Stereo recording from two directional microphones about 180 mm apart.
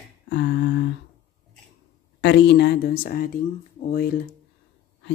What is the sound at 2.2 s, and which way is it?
Speech, 70° left (ahead or behind).